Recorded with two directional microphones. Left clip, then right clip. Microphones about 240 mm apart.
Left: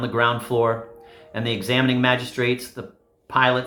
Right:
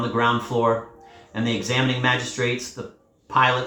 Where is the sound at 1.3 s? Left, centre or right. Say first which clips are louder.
Left 1 dB; left.